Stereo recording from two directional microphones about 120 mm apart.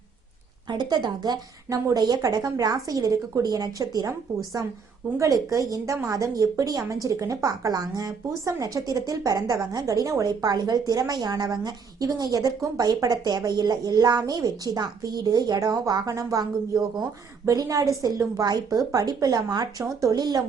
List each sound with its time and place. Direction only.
0.7 s a woman's voice: 35° right (ahead or behind)
5.2 s a woman's voice: 25° right (ahead or behind)